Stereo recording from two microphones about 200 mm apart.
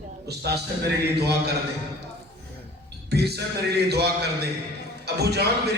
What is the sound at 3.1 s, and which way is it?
A man's voice, 55° right (ahead or behind).